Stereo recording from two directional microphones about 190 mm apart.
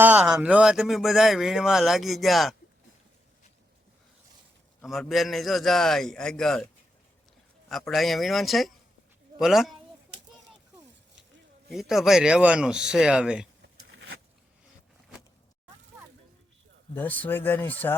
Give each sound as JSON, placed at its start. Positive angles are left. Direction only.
{"t": 0.0, "sound": "speech", "side_deg": -10}
{"t": 4.8, "sound": "speech", "side_deg": 0}
{"t": 7.7, "sound": "speech", "side_deg": 0}
{"t": 11.7, "sound": "speech", "side_deg": 0}
{"t": 13.9, "sound": "a sound", "side_deg": -80}
{"t": 16.9, "sound": "speech", "side_deg": 10}